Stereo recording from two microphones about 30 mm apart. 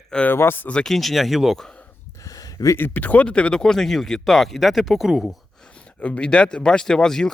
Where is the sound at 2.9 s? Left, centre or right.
Left.